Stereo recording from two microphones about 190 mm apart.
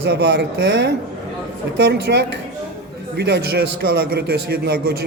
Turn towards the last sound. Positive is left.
turn(degrees=-55)  # may be behind; listen again after turning